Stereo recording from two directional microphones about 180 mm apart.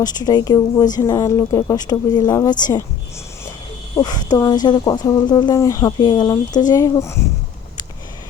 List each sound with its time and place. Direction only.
0.0 s speech: 20° left (ahead or behind)
3.9 s speech: 20° left (ahead or behind)